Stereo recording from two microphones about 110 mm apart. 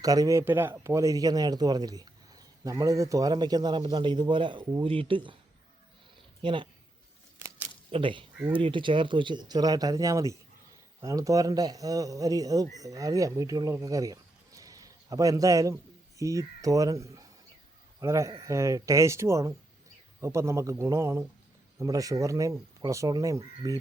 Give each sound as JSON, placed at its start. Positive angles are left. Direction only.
{"t": 0.0, "sound": "speech", "side_deg": -35}
{"t": 0.4, "sound": "speech", "side_deg": -20}
{"t": 6.4, "sound": "speech", "side_deg": -45}
{"t": 7.9, "sound": "a man's voice", "side_deg": -55}